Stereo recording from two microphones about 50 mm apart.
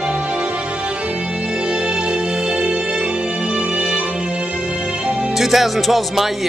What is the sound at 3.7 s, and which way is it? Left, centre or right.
Music, centre.